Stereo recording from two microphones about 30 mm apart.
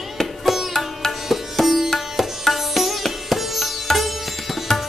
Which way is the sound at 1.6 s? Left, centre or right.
Centre.